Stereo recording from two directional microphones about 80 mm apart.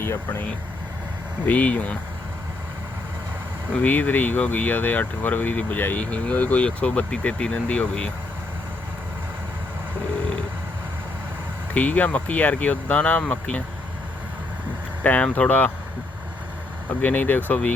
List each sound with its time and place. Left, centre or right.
1.5 s speech: centre
3.7 s speech: centre
11.7 s speech: centre
15.0 s speech: centre
17.0 s speech: left